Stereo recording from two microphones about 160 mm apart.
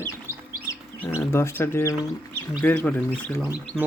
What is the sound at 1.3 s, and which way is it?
Speech, 15° left (ahead or behind).